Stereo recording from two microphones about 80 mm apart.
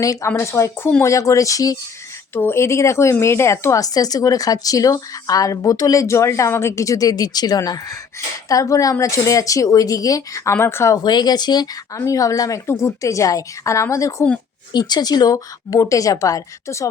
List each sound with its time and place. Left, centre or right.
0.0 s a woman's voice: left
2.3 s a woman's voice: left
10.5 s a woman's voice: left
10.9 s speech: left
12.0 s a woman's voice: left
14.7 s speech: left
15.8 s a woman's voice: left